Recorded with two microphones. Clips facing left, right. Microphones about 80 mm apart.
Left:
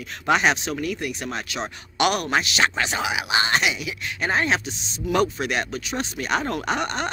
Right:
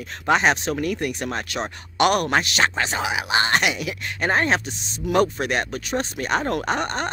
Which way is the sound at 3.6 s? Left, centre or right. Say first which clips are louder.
Right 1 dB; right.